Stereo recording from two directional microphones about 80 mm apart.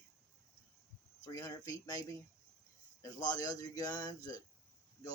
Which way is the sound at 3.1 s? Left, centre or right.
Left.